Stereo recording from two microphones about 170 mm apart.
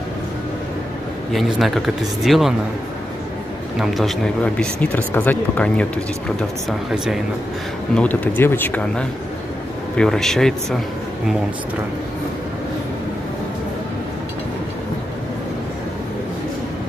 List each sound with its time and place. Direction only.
1.3 s speech: centre (ahead or behind)
3.8 s speech: centre (ahead or behind)
7.9 s speech: 10° left (ahead or behind)